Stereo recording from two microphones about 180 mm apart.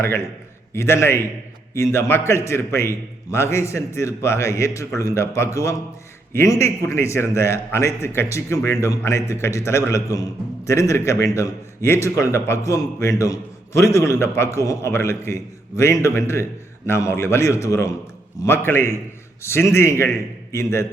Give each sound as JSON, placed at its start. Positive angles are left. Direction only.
{"t": 0.7, "sound": "a man's voice", "side_deg": 15}